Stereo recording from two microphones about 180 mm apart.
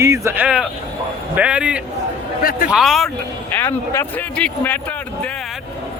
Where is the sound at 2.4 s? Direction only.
55° left (ahead or behind).